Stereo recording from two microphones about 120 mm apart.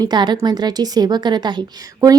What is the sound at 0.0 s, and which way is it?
A woman's voice, 35° right (ahead or behind).